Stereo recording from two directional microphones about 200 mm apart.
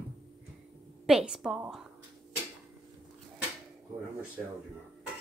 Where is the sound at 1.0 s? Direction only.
5° right (ahead or behind).